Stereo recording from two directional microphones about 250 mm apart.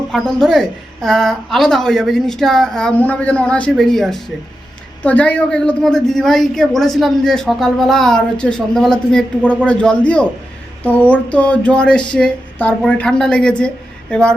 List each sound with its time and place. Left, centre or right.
0.1 s a woman's voice: centre